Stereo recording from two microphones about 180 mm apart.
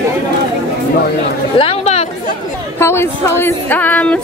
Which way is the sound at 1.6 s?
35° left (ahead or behind).